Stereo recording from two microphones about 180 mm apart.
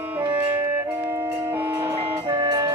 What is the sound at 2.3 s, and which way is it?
Music, 20° right (ahead or behind).